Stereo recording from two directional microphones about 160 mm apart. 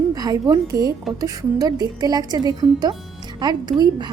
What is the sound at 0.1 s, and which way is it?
Speech, 25° right (ahead or behind).